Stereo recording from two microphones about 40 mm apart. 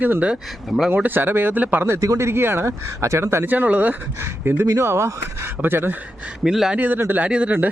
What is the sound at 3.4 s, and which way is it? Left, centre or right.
Speech, right.